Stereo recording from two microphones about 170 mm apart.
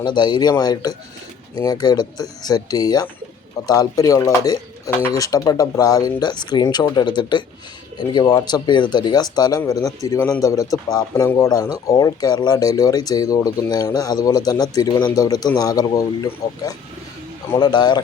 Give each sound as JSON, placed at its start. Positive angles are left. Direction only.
{"t": 0.0, "sound": "speech", "side_deg": 25}